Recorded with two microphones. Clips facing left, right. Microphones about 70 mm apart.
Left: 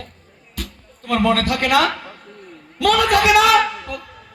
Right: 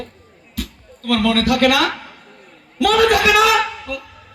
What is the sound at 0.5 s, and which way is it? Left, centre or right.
Music, left.